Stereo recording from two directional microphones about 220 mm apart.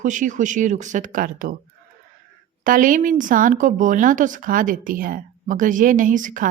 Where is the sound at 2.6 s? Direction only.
35° right (ahead or behind).